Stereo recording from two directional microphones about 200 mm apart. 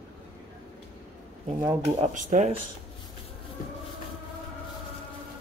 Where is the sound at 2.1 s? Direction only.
40° right (ahead or behind).